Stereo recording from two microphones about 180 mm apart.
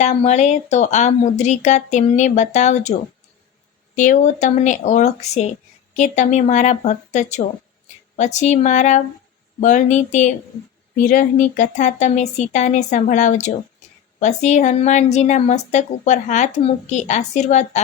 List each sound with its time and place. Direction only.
0.0 s speech: 35° left (ahead or behind)
3.9 s speech: 45° left (ahead or behind)